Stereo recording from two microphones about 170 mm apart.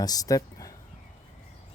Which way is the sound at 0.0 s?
20° left (ahead or behind).